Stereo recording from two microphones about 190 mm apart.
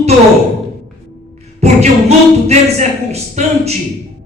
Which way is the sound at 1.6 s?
35° right (ahead or behind).